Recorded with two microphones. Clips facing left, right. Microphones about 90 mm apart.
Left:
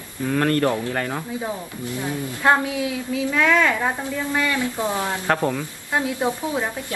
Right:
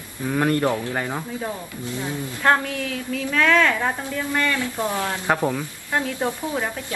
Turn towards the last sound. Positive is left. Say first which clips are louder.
# left 1 dB
turn(degrees=15)  # may be behind; listen again after turning